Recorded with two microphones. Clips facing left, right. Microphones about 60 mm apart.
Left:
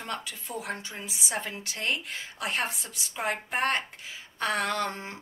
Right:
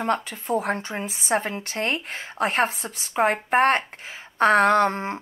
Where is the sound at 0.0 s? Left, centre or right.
Right.